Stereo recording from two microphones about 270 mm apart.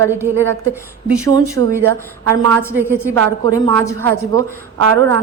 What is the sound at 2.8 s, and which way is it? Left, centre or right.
Speech, centre.